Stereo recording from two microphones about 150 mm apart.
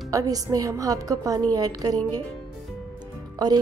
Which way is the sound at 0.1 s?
25° right (ahead or behind).